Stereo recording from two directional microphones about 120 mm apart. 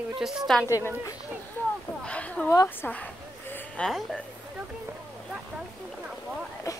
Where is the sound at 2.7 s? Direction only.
15° left (ahead or behind).